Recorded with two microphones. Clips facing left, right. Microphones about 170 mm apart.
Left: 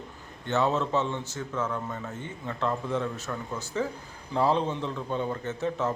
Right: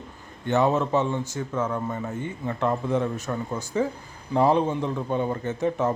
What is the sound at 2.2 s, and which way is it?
A man's voice, 15° right (ahead or behind).